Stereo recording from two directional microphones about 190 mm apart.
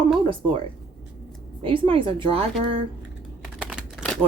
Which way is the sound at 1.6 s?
25° right (ahead or behind).